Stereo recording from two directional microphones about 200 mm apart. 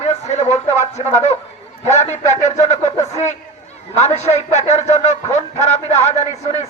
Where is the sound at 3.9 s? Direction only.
35° left (ahead or behind).